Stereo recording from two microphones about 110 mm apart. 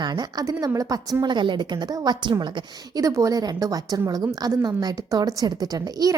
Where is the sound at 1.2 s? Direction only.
45° right (ahead or behind).